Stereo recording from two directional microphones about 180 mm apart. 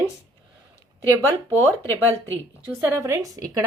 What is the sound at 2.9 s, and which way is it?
Speech, 15° right (ahead or behind).